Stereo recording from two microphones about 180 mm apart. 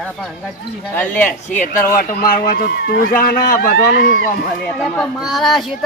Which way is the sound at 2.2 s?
55° left (ahead or behind).